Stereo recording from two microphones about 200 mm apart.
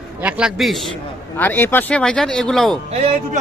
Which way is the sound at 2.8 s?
30° right (ahead or behind).